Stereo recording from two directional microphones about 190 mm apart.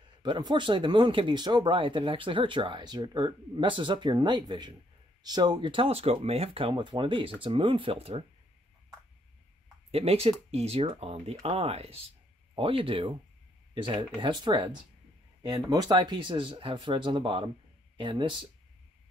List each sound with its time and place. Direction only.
0.2 s speech: 25° right (ahead or behind)
9.8 s speech: 30° right (ahead or behind)